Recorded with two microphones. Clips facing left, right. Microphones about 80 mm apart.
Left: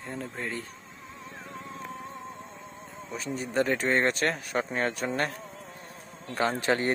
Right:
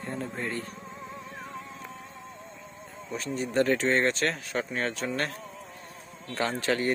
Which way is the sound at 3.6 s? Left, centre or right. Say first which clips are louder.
Right 1 dB; centre.